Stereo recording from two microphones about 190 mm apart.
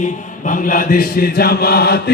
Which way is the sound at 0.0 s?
45° left (ahead or behind).